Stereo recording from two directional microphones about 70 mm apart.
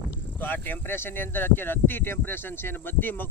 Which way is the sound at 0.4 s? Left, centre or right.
Left.